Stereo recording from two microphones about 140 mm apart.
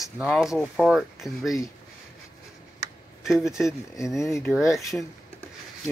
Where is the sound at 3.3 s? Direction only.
5° right (ahead or behind).